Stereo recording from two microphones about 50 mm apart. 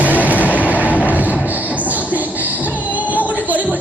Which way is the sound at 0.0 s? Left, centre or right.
Right.